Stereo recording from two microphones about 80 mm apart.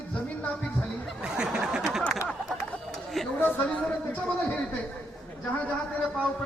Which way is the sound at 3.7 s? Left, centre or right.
Centre.